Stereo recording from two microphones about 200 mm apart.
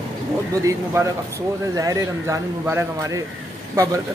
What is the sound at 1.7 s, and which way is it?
A man's voice, 15° right (ahead or behind).